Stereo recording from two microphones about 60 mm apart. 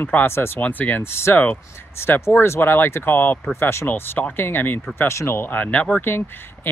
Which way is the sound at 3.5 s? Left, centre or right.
Left.